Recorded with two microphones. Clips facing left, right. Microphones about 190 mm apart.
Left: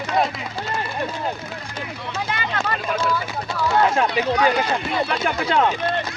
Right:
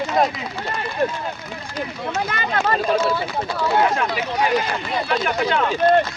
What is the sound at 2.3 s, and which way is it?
Speech, 45° right (ahead or behind).